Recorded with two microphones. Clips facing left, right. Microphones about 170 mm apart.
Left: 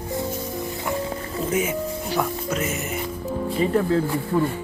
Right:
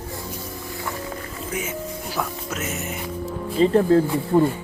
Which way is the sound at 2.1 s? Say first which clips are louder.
Left 4 dB; centre (ahead or behind).